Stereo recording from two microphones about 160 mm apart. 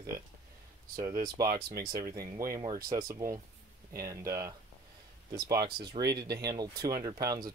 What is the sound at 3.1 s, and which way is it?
Speech, 20° right (ahead or behind).